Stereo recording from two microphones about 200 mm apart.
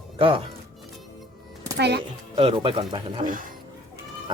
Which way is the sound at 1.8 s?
55° right (ahead or behind).